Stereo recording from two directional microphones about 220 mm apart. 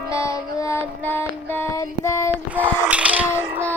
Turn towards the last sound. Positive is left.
turn(degrees=-5)  # may be behind; listen again after turning